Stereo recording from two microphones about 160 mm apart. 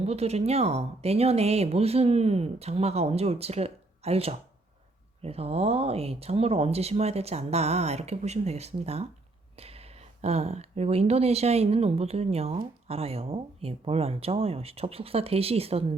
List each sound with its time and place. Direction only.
0.0 s speech: 40° right (ahead or behind)